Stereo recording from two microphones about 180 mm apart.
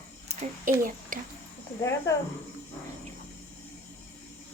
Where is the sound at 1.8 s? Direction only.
15° left (ahead or behind).